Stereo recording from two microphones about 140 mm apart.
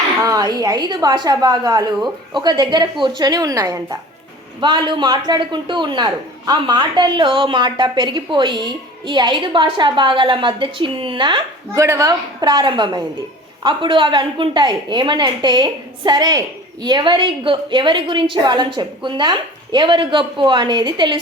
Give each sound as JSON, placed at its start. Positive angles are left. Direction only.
{"t": 0.2, "sound": "a man's voice", "side_deg": -25}
{"t": 11.7, "sound": "a man's voice", "side_deg": -20}